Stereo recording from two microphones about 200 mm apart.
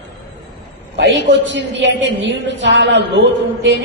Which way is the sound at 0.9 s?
60° right (ahead or behind).